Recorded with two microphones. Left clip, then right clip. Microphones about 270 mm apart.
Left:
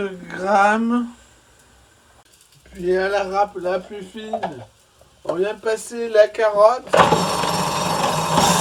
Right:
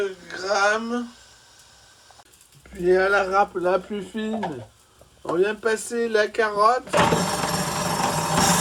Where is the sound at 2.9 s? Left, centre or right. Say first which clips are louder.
Right 1 dB; centre.